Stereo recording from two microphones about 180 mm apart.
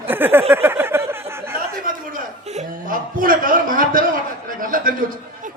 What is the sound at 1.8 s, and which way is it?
A man's voice, 50° right (ahead or behind).